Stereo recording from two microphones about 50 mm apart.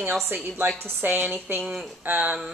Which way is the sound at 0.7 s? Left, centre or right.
Right.